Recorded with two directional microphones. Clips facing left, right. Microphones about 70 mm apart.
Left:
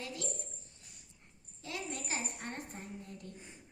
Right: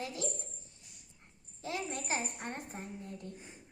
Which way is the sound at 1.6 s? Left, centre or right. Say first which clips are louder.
Right 4 dB; right.